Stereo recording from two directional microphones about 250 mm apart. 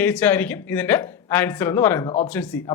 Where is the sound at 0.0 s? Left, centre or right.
Centre.